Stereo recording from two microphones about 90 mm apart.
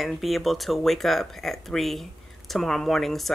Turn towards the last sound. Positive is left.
turn(degrees=0)  # may be behind; listen again after turning